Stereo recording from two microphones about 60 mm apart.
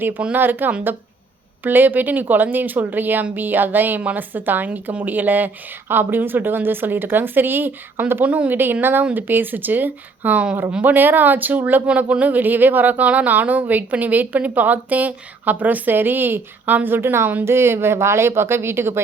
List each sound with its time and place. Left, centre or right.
0.3 s speech: right
8.2 s speech: right
8.5 s speech: right